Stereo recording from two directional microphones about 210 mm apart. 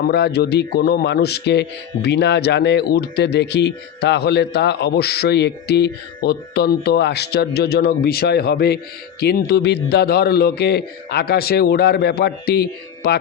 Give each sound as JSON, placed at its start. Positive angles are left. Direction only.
{"t": 0.1, "sound": "a man's voice", "side_deg": 55}